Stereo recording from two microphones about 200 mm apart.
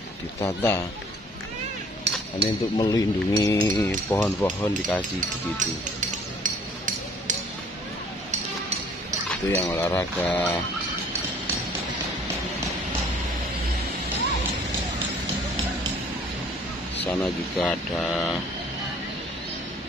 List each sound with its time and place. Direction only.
0.4 s speech: 10° left (ahead or behind)
2.1 s chink: 60° right (ahead or behind)
2.8 s speech: 20° left (ahead or behind)
5.6 s a sound: 40° right (ahead or behind)
9.3 s speech: 10° left (ahead or behind)
17.0 s speech: 5° left (ahead or behind)